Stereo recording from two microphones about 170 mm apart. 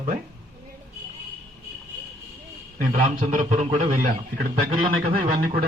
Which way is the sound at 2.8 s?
55° right (ahead or behind).